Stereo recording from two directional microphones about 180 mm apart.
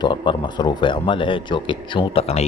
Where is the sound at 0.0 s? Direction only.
25° left (ahead or behind).